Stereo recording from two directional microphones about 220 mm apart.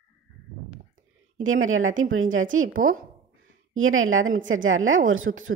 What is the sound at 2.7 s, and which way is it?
Speech, 40° right (ahead or behind).